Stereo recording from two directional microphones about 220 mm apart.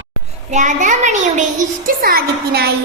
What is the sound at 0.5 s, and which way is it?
Child singing, 35° right (ahead or behind).